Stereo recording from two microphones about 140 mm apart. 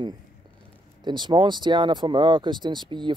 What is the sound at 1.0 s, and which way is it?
Speech, 35° right (ahead or behind).